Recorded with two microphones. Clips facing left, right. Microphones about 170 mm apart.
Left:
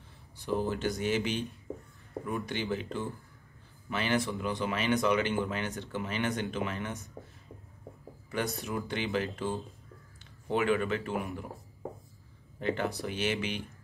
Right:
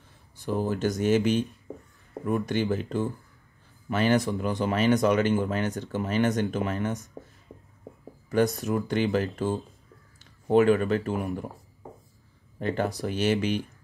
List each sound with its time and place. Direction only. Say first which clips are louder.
0.6 s speech: right 6 dB; 45° right (ahead or behind)
8.3 s speech: right 9 dB; 40° right (ahead or behind)
12.5 s speech: right 4 dB; 40° right (ahead or behind)